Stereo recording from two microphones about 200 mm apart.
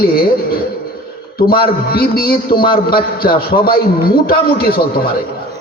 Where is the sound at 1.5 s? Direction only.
50° left (ahead or behind).